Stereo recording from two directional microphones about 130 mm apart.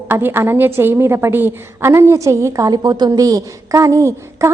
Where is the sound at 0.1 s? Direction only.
15° right (ahead or behind).